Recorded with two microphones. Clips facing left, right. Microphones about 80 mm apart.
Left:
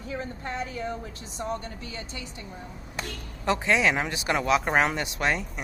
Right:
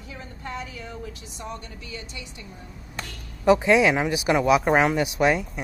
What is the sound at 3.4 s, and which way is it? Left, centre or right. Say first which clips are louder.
Speech: right 6 dB; centre.